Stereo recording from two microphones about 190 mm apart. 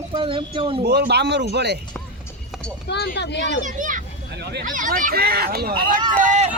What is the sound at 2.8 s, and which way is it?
Speech, 65° left (ahead or behind).